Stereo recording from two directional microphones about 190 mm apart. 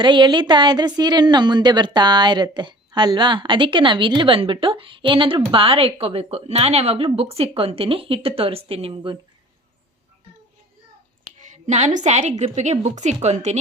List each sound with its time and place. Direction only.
0.0 s a woman's voice: 25° right (ahead or behind)
11.2 s a woman's voice: 40° right (ahead or behind)